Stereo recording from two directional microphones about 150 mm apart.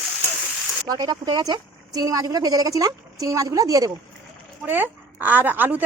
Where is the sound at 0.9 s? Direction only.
25° right (ahead or behind).